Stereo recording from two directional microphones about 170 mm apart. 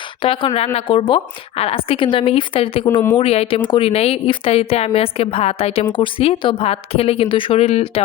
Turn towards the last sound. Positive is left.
turn(degrees=35)  # may be behind; listen again after turning